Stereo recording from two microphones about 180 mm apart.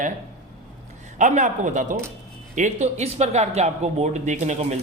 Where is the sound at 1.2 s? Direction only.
45° right (ahead or behind).